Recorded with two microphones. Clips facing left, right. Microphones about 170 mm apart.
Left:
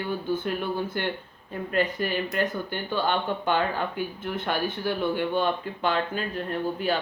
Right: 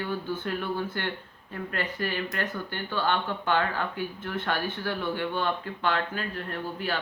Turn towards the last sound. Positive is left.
turn(degrees=20)  # may be behind; listen again after turning